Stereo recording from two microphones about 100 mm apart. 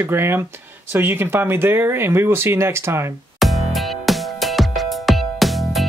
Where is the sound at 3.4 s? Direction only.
Centre (ahead or behind).